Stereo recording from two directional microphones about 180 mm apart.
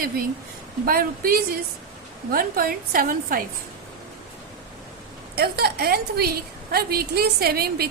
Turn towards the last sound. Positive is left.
turn(degrees=-60)  # may be behind; listen again after turning